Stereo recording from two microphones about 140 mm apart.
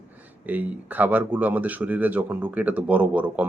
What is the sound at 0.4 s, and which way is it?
Speech, 10° right (ahead or behind).